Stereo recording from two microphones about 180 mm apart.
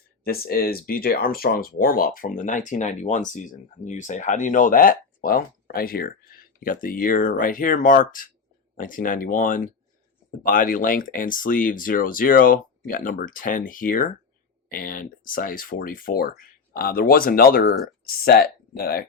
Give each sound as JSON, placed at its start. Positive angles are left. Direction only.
{"t": 0.3, "sound": "speech", "side_deg": 60}